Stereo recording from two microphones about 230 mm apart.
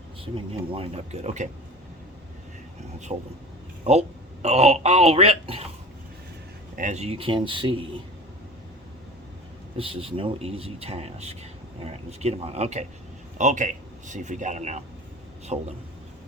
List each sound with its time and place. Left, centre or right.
0.3 s speech: right
3.1 s speech: right
4.4 s speech: right
6.7 s speech: right
9.7 s a man's voice: right